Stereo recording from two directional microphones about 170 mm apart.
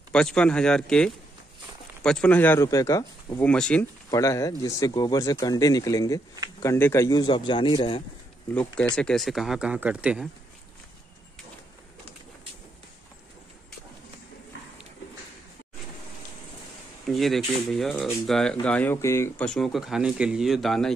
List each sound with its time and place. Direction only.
0.1 s speech: 5° left (ahead or behind)
3.4 s speech: 5° left (ahead or behind)
4.1 s speech: 20° left (ahead or behind)
8.9 s speech: 5° left (ahead or behind)
17.1 s speech: centre (ahead or behind)